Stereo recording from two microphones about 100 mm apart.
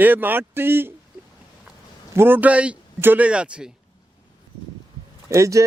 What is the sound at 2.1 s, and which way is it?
Speech, 25° right (ahead or behind).